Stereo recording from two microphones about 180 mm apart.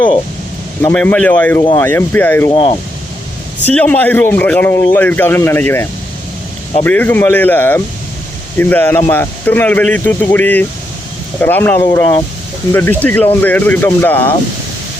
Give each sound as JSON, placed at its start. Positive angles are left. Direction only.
{"t": 0.8, "sound": "a man's voice", "side_deg": 10}
{"t": 2.5, "sound": "speech", "side_deg": 30}
{"t": 3.6, "sound": "a man's voice", "side_deg": 10}